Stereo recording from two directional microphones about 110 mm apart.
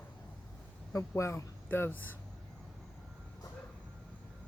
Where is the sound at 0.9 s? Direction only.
25° left (ahead or behind).